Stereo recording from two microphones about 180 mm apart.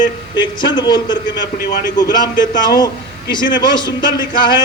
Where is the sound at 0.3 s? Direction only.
25° left (ahead or behind).